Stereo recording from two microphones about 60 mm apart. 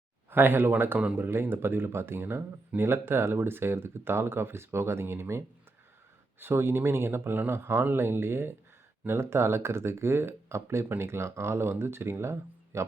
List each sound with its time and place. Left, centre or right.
0.3 s speech: right
0.9 s speech: right
1.2 s speech: right
6.4 s speech: right